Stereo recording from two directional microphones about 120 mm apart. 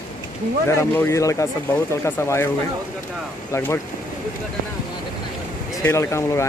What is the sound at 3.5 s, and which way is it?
Speech, 20° left (ahead or behind).